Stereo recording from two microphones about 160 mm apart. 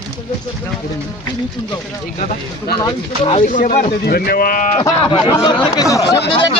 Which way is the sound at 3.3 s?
50° left (ahead or behind).